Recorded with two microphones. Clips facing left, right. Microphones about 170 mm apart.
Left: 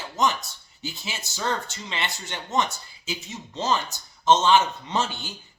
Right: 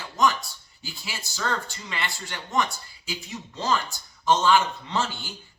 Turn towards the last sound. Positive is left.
turn(degrees=20)  # may be behind; listen again after turning